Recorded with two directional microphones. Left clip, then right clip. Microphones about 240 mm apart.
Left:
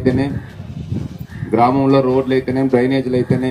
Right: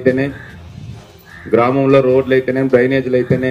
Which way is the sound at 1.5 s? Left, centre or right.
Left.